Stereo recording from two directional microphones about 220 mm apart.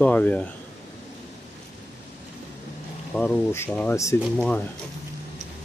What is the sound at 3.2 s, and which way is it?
Speech, 10° left (ahead or behind).